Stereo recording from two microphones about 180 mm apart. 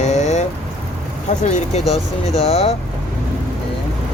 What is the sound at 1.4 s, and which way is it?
Speech, 40° left (ahead or behind).